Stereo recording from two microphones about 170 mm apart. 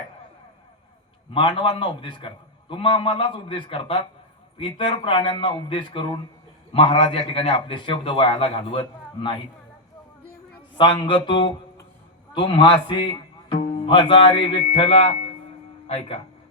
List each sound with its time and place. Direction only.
1.3 s a man's voice: 30° left (ahead or behind)
10.8 s speech: 30° left (ahead or behind)